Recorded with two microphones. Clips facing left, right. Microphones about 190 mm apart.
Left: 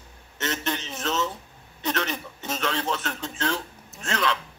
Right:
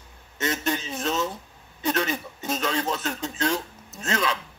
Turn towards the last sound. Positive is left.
turn(degrees=-5)  # may be behind; listen again after turning